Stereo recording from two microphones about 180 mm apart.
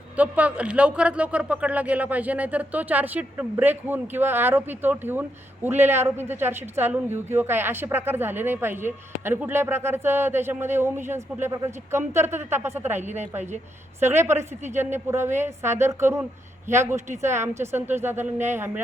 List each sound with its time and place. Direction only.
0.2 s speech: 10° right (ahead or behind)